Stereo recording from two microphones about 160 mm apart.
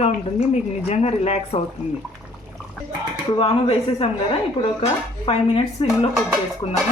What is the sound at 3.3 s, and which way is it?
Speech, 35° left (ahead or behind).